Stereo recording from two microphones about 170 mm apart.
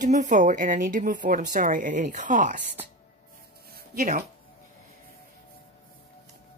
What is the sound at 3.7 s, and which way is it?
Music, 60° right (ahead or behind).